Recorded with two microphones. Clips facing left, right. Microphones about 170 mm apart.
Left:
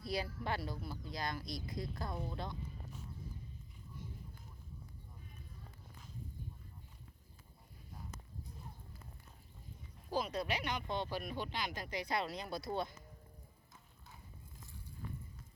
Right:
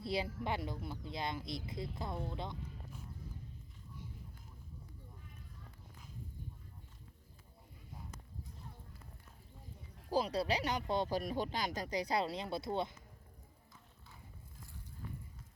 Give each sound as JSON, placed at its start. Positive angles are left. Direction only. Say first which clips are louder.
{"t": 0.0, "sound": "speech", "louder": "right 2 dB", "side_deg": -25}
{"t": 10.1, "sound": "speech", "louder": "right 4 dB", "side_deg": -35}